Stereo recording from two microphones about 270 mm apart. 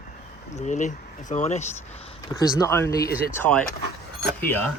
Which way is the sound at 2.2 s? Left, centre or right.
Centre.